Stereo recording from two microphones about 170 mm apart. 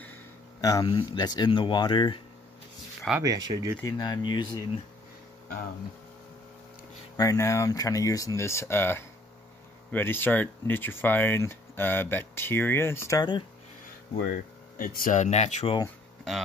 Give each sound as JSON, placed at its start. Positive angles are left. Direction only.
{"t": 0.6, "sound": "speech", "side_deg": 20}
{"t": 3.2, "sound": "speech", "side_deg": -20}
{"t": 3.8, "sound": "speech", "side_deg": 25}
{"t": 7.2, "sound": "speech", "side_deg": 20}
{"t": 14.1, "sound": "speech", "side_deg": 60}